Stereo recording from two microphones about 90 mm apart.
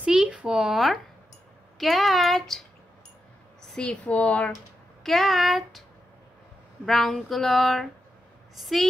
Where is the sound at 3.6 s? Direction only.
5° left (ahead or behind).